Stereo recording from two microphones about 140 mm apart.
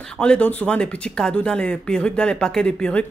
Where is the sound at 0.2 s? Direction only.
10° left (ahead or behind).